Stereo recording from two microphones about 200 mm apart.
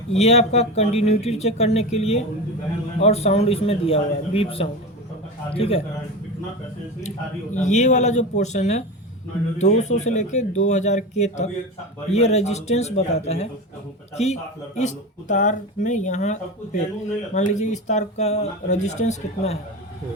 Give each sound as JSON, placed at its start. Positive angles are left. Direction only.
{"t": 0.1, "sound": "a man's voice", "side_deg": 30}
{"t": 7.5, "sound": "speech", "side_deg": 35}
{"t": 14.8, "sound": "speech", "side_deg": 35}